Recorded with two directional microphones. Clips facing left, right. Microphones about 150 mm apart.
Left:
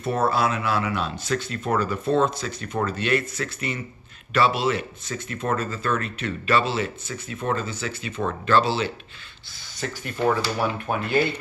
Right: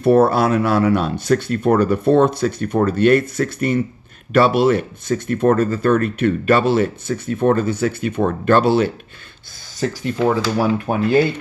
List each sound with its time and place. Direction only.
0.3 s speech: 55° right (ahead or behind)
9.8 s speech: 30° right (ahead or behind)